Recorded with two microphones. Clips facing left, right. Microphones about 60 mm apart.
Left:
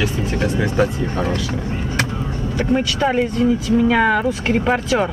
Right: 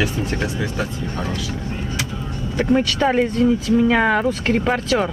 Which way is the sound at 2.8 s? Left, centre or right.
Centre.